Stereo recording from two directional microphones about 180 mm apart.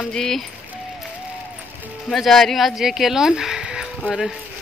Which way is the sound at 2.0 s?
Centre (ahead or behind).